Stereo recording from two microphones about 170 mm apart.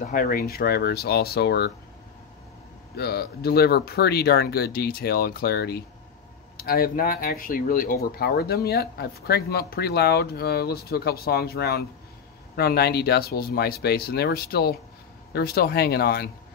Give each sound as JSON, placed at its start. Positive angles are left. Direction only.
{"t": 0.0, "sound": "speech", "side_deg": 55}
{"t": 3.0, "sound": "speech", "side_deg": 70}